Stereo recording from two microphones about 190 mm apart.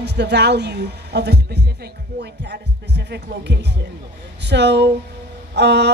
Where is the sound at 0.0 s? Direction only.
65° right (ahead or behind).